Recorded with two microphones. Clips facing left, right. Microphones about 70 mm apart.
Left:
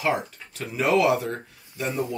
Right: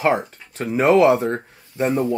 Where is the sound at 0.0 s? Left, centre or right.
Right.